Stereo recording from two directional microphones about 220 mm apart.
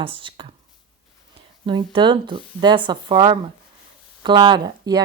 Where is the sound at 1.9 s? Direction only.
20° right (ahead or behind).